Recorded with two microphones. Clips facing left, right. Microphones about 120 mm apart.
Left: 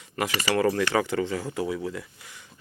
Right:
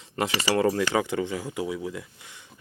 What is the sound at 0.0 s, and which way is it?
Speech, 30° right (ahead or behind).